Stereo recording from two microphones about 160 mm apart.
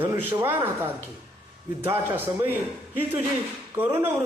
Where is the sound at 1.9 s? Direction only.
10° right (ahead or behind).